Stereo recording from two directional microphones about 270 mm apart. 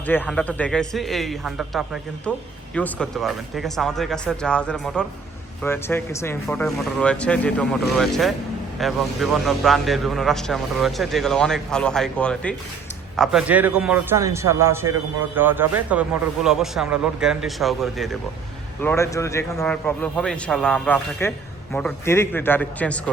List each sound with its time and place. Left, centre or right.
0.1 s a man's voice: centre